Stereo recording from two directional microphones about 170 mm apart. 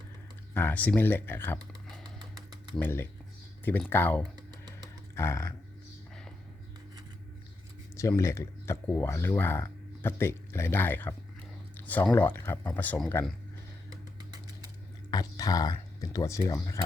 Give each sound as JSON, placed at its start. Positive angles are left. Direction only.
{"t": 0.5, "sound": "speech", "side_deg": 10}
{"t": 2.3, "sound": "typewriter", "side_deg": 10}
{"t": 3.6, "sound": "speech", "side_deg": 10}
{"t": 4.2, "sound": "typing", "side_deg": -25}
{"t": 5.1, "sound": "speech", "side_deg": 15}
{"t": 7.9, "sound": "speech", "side_deg": 15}
{"t": 15.1, "sound": "speech", "side_deg": 20}